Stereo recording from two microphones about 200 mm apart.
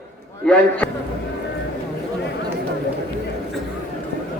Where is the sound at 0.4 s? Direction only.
5° left (ahead or behind).